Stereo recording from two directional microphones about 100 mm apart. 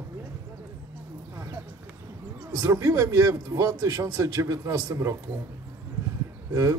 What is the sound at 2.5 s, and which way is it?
A man's voice, 35° right (ahead or behind).